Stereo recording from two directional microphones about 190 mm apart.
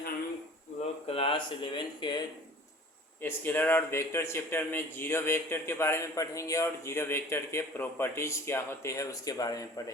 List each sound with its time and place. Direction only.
1.0 s speech: 30° left (ahead or behind)
3.2 s a man's voice: 10° left (ahead or behind)